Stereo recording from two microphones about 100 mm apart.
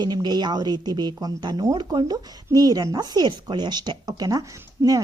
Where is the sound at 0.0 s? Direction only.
45° right (ahead or behind).